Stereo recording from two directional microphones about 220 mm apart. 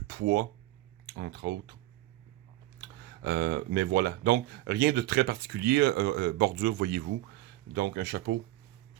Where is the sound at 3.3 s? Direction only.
50° right (ahead or behind).